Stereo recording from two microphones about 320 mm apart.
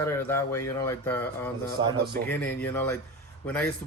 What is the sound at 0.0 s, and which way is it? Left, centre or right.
Speech, centre.